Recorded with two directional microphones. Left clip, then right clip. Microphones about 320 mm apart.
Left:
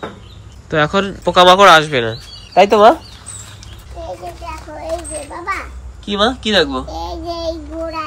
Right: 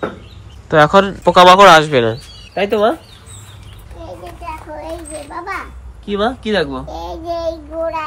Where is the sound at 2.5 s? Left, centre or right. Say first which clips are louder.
Left 7 dB; left.